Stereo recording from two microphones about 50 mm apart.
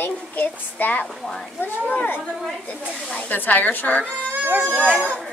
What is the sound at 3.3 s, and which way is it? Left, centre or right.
Speech, left.